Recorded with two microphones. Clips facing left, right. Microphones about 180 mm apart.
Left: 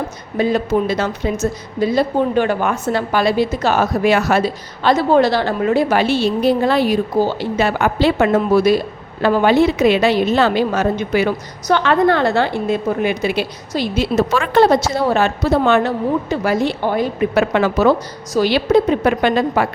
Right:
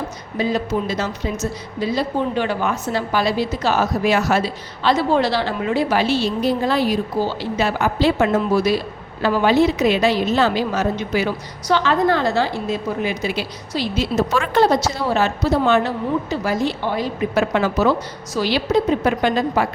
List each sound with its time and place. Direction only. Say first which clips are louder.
0.3 s a woman's voice: left 5 dB; 55° left (ahead or behind)